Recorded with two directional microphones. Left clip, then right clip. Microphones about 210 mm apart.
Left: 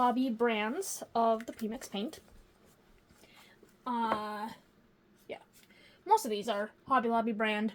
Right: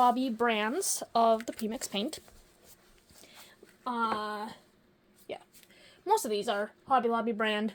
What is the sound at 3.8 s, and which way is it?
Speech, 40° right (ahead or behind).